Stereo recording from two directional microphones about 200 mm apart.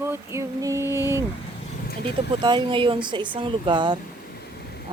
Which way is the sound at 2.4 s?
25° right (ahead or behind).